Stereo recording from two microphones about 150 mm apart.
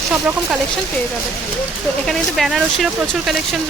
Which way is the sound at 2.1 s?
Centre (ahead or behind).